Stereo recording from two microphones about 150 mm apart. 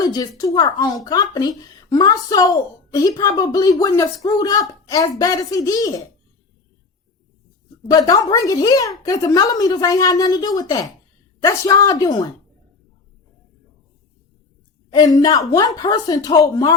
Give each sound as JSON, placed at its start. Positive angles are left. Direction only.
{"t": 0.0, "sound": "speech", "side_deg": 25}
{"t": 7.9, "sound": "speech", "side_deg": 25}
{"t": 14.8, "sound": "speech", "side_deg": 25}